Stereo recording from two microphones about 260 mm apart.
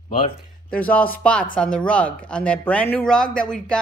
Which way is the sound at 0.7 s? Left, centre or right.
Centre.